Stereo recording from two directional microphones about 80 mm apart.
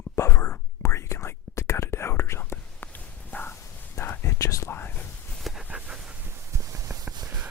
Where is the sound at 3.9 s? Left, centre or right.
Left.